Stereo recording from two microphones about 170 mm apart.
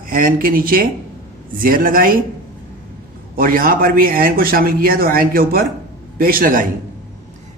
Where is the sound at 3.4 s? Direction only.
60° right (ahead or behind).